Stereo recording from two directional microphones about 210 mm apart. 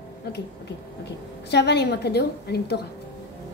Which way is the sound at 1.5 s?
50° left (ahead or behind).